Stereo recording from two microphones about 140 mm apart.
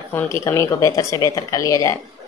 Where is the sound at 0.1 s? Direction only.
15° left (ahead or behind).